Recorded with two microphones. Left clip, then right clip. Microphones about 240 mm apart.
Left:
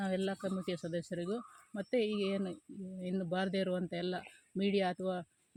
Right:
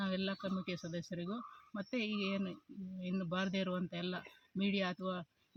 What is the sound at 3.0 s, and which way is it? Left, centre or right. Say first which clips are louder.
Speech: left 3 dB; right.